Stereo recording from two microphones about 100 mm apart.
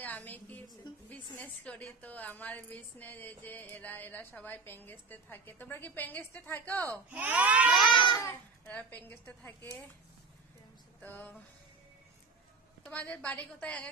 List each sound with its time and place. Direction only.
0.0 s a woman's voice: 15° left (ahead or behind)
7.1 s speech: 15° right (ahead or behind)
7.8 s speech: 50° left (ahead or behind)
8.6 s a woman's voice: 20° left (ahead or behind)
11.0 s a sound: 20° left (ahead or behind)
12.8 s a woman's voice: 15° left (ahead or behind)